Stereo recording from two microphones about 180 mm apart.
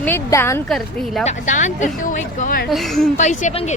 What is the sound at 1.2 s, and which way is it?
Speech, 40° left (ahead or behind).